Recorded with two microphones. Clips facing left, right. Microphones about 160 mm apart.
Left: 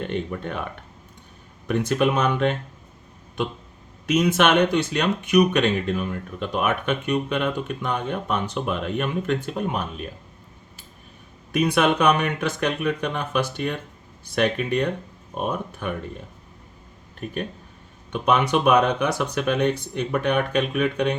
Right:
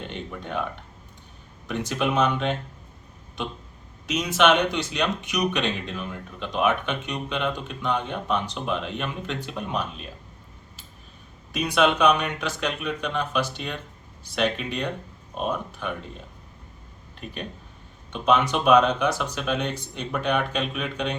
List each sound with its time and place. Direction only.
0.0 s speech: 55° left (ahead or behind)
1.6 s speech: 55° left (ahead or behind)
4.0 s speech: 55° left (ahead or behind)
11.5 s speech: 55° left (ahead or behind)
18.1 s speech: 60° left (ahead or behind)